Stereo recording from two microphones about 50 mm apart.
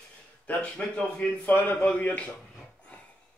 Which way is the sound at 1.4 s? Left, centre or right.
Left.